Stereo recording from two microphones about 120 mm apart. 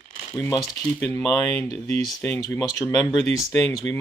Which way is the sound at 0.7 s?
15° left (ahead or behind).